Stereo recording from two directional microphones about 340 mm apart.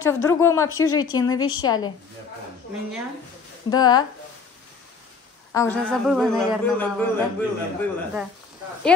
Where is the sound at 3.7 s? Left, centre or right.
Centre.